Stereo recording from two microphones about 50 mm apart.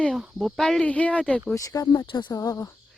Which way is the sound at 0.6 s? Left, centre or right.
Centre.